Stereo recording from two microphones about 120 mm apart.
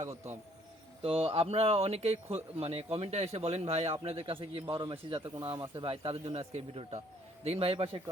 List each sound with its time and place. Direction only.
1.0 s a man's voice: 55° right (ahead or behind)
5.8 s a man's voice: 50° right (ahead or behind)